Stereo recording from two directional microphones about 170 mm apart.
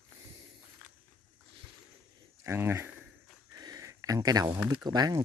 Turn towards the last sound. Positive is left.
turn(degrees=-25)  # may be behind; listen again after turning